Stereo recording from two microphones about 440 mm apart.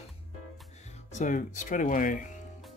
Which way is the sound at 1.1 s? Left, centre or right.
Centre.